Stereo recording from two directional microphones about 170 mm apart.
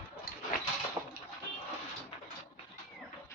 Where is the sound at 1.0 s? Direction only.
15° right (ahead or behind).